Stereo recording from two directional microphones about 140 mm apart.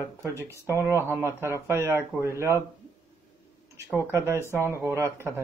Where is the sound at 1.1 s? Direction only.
15° right (ahead or behind).